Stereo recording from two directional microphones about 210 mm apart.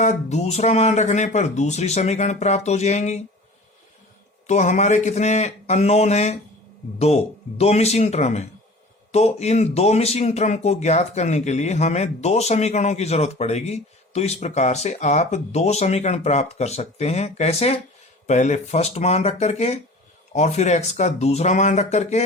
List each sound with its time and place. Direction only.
0.0 s speech: 35° left (ahead or behind)
4.4 s speech: 35° left (ahead or behind)
7.6 s speech: 30° left (ahead or behind)